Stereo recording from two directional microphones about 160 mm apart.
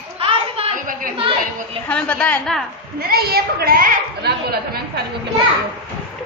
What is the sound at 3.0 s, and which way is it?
A woman's voice, 70° right (ahead or behind).